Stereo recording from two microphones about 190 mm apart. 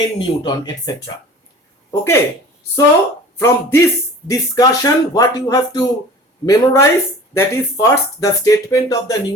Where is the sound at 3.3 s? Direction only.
15° left (ahead or behind).